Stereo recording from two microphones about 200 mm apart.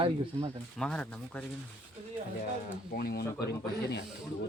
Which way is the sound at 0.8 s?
5° left (ahead or behind).